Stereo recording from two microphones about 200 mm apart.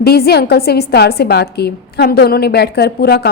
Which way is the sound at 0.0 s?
50° left (ahead or behind).